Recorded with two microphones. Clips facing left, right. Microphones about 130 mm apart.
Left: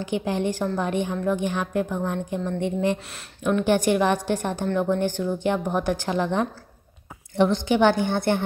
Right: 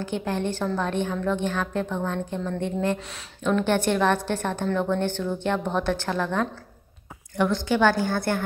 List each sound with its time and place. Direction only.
0.0 s a woman's voice: 15° left (ahead or behind)